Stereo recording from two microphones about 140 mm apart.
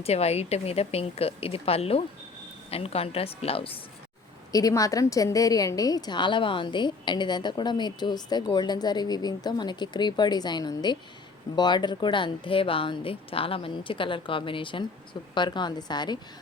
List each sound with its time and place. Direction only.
0.0 s speech: 50° left (ahead or behind)
4.5 s a woman's voice: 25° left (ahead or behind)